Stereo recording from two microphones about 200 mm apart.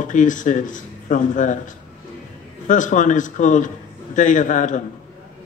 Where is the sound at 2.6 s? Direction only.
40° left (ahead or behind).